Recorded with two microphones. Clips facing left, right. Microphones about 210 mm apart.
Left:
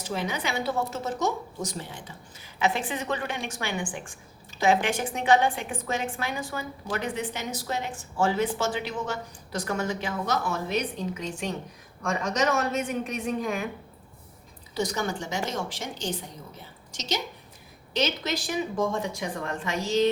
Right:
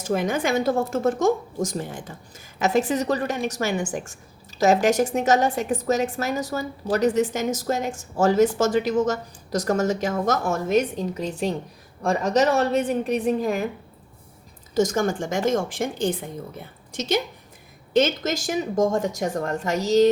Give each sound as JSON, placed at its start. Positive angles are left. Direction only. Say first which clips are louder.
{"t": 0.0, "sound": "a woman's voice", "louder": "right 7 dB", "side_deg": -50}
{"t": 14.8, "sound": "a woman's voice", "louder": "right 8 dB", "side_deg": -45}